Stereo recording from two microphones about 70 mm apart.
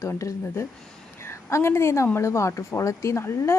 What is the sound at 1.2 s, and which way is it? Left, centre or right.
A woman's voice, left.